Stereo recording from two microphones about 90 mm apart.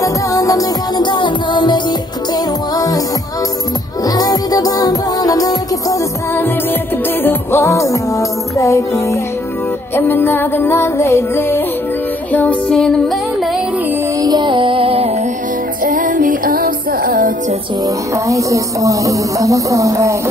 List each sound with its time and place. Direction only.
0.0 s music: 40° left (ahead or behind)
1.0 s music: 60° left (ahead or behind)
2.3 s music: 40° left (ahead or behind)
4.0 s music: 45° left (ahead or behind)
7.2 s music: 30° left (ahead or behind)
9.9 s music: 25° left (ahead or behind)
12.7 s music: centre (ahead or behind)
14.2 s music: 55° right (ahead or behind); by 15.0 s 90° right
17.8 s music: 35° right (ahead or behind)